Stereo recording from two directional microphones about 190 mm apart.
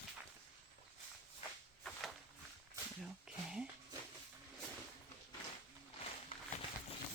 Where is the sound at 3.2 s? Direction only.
5° right (ahead or behind).